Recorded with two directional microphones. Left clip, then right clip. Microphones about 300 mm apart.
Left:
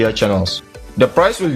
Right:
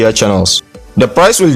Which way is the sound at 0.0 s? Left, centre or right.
Right.